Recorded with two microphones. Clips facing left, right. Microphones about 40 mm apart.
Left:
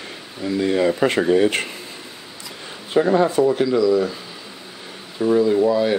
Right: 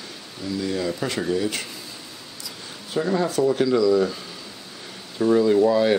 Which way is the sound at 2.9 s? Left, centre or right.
Left.